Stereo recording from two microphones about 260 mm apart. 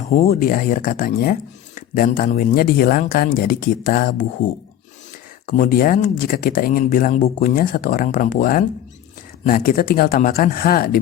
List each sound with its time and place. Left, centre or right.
0.3 s speech: left
5.5 s speech: left